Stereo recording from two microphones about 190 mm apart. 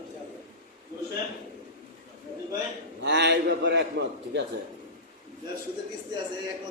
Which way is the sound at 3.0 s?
65° right (ahead or behind).